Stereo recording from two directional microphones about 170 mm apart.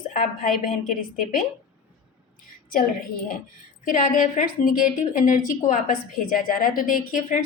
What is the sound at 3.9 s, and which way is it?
A woman's voice, 50° left (ahead or behind).